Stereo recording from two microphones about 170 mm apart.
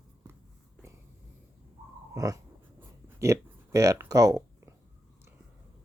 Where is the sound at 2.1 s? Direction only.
20° right (ahead or behind).